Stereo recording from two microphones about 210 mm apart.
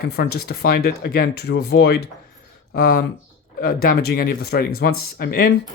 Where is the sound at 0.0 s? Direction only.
50° left (ahead or behind).